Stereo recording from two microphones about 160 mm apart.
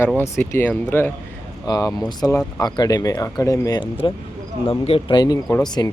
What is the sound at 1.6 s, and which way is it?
Speech, 25° left (ahead or behind).